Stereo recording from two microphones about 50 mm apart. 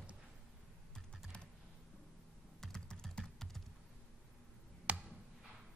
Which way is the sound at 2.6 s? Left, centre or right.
Centre.